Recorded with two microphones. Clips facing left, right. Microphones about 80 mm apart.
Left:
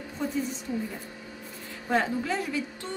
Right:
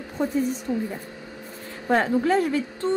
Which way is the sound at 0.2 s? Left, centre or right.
Right.